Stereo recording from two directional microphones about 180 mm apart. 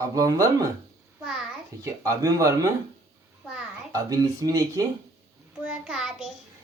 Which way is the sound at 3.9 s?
20° right (ahead or behind).